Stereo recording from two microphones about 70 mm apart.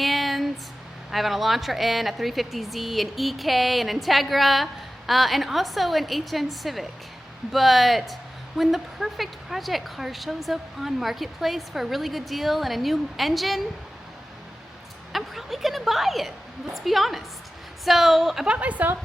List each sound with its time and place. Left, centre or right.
0.0 s a sound: centre
1.1 s speech: centre
15.1 s speech: centre
18.5 s a woman's voice: centre